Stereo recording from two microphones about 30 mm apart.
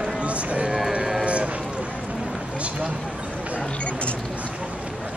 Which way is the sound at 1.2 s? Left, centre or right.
Right.